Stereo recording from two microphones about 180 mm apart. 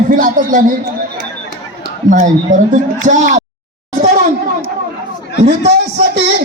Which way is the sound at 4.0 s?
40° right (ahead or behind).